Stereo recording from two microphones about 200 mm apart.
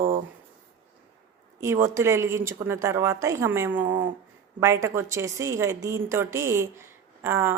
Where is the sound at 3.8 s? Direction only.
25° right (ahead or behind).